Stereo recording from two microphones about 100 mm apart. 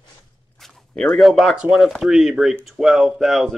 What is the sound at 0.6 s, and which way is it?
Speech, 5° left (ahead or behind).